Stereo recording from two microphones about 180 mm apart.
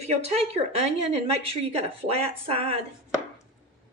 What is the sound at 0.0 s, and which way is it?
A woman's voice, 35° right (ahead or behind).